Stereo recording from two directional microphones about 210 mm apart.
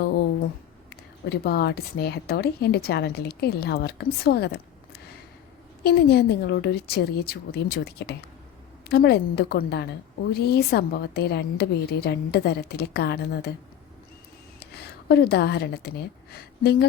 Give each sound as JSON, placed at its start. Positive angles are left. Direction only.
{"t": 1.3, "sound": "a woman's voice", "side_deg": 50}
{"t": 5.8, "sound": "a woman's voice", "side_deg": 50}
{"t": 14.6, "sound": "a woman's voice", "side_deg": 50}